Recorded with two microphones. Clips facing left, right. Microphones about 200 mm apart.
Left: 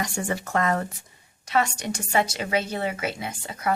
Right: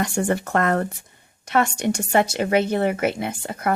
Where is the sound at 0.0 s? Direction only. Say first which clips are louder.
Right 6 dB; 55° right (ahead or behind).